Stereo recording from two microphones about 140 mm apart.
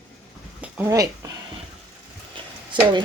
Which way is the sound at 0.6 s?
10° right (ahead or behind).